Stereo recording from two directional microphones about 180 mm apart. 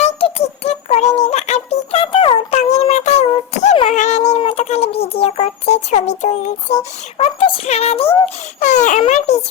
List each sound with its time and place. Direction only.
0.0 s music: 35° left (ahead or behind)
3.9 s child singing: 40° left (ahead or behind)
8.6 s baby cry: 45° left (ahead or behind)
9.0 s a sound: 40° left (ahead or behind)